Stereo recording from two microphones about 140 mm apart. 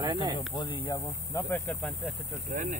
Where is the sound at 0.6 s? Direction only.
35° left (ahead or behind).